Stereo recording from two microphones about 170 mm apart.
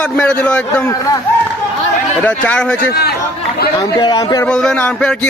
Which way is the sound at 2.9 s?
75° left (ahead or behind).